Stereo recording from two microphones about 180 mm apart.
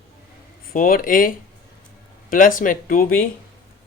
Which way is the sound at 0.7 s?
55° left (ahead or behind).